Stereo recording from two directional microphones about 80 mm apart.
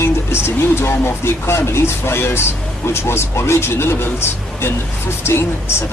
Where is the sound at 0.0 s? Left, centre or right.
Left.